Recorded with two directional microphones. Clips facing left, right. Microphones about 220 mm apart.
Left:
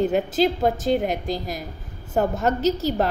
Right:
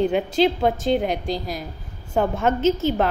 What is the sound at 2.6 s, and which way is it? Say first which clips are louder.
Speech: right 3 dB; 40° left (ahead or behind).